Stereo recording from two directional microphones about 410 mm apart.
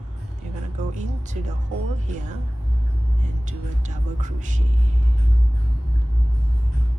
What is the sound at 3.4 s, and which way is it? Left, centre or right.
Speech, centre.